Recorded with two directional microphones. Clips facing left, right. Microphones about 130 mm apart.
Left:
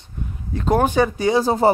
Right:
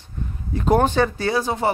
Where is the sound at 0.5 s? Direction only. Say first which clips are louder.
Right 1 dB; 5° right (ahead or behind).